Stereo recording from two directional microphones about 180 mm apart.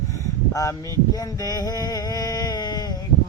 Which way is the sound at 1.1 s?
20° left (ahead or behind).